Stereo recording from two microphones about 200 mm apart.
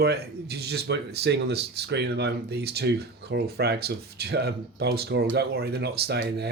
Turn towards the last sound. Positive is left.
turn(degrees=-55)  # may be behind; listen again after turning